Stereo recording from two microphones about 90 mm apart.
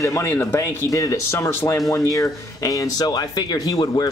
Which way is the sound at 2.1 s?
40° left (ahead or behind).